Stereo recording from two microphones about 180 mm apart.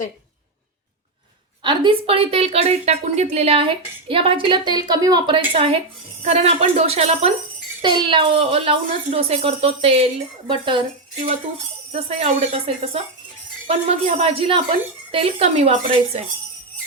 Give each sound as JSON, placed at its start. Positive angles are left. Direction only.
{"t": 1.6, "sound": "a woman's voice", "side_deg": -25}
{"t": 7.8, "sound": "a woman's voice", "side_deg": -25}